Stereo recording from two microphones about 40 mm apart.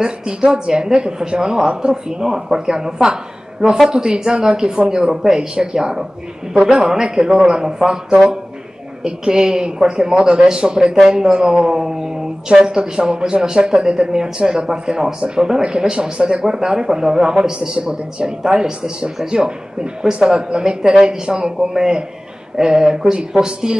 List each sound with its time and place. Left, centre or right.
0.0 s speech: centre